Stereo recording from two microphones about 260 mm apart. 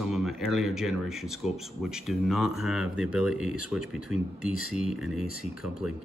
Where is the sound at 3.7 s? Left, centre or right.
Centre.